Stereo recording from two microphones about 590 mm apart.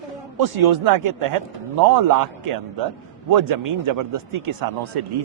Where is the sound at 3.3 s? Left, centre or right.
Right.